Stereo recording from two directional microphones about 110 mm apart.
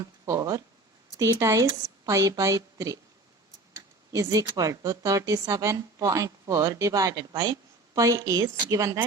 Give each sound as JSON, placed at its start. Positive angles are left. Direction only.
{"t": 0.3, "sound": "a woman's voice", "side_deg": -35}
{"t": 4.1, "sound": "a woman's voice", "side_deg": -30}